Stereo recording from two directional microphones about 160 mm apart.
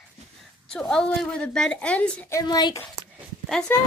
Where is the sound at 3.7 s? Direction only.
15° left (ahead or behind).